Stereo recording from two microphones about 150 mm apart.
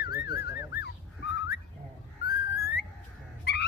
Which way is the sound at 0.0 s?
90° left.